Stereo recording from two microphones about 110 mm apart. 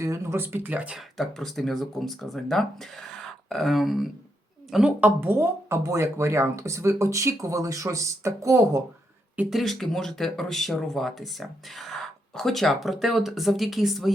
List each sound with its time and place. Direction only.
0.0 s speech: 25° right (ahead or behind)
9.5 s speech: centre (ahead or behind)